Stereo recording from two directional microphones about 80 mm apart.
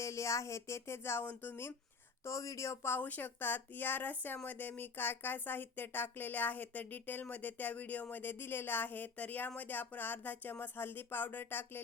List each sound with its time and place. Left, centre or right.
0.0 s speech: left
2.2 s speech: left
3.0 s speech: left